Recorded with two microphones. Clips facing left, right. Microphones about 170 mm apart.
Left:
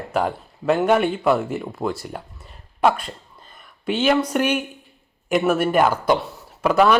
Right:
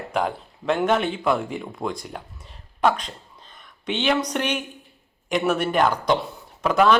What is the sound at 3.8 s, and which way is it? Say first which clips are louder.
Speech: left 4 dB; 5° left (ahead or behind).